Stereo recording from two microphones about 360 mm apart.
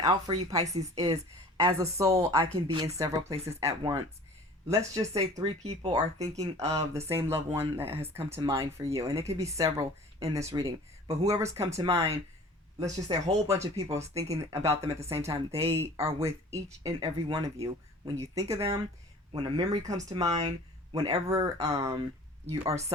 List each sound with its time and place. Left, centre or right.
0.0 s speech: centre